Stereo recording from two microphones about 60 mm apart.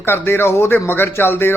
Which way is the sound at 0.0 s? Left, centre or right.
Left.